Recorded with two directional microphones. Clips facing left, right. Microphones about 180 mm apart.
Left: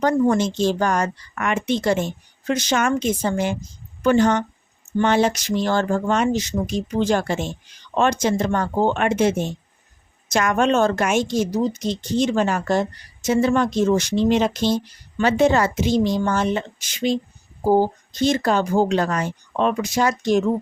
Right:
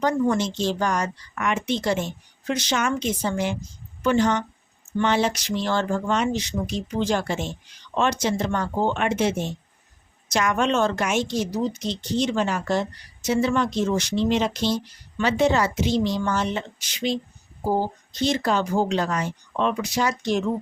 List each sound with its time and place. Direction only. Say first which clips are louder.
0.0 s a woman's voice: left 4 dB; 50° left (ahead or behind)